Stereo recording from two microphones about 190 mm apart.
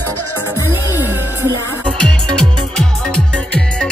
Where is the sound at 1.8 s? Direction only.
5° left (ahead or behind).